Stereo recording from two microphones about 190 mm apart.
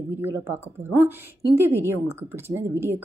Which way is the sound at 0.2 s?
10° right (ahead or behind).